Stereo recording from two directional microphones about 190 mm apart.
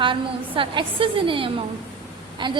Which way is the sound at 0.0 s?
25° right (ahead or behind).